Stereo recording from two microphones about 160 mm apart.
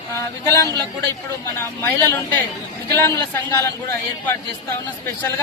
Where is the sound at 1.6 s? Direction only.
15° left (ahead or behind).